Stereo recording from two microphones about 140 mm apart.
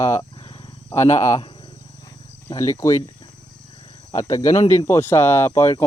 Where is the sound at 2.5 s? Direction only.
20° left (ahead or behind).